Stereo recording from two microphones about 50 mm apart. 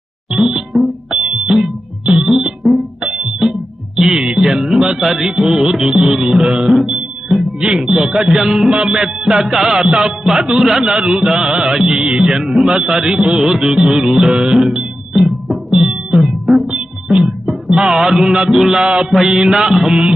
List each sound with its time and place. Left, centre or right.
0.3 s music: centre
0.7 s music: centre
1.3 s music: centre
2.3 s music: centre
3.1 s music: right
3.4 s music: centre
7.6 s speech: centre
7.9 s music: centre